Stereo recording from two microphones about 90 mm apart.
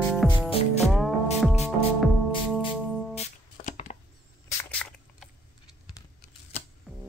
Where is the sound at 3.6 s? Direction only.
90° left.